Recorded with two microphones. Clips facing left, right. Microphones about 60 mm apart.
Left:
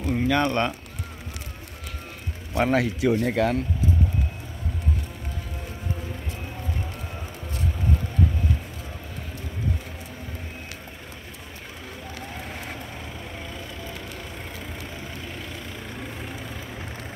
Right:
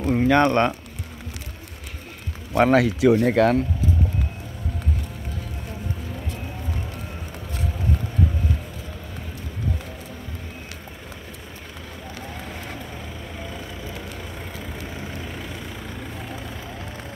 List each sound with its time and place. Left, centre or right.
0.0 s a sound: right
0.4 s speech: right
2.5 s speech: right
3.3 s speech: right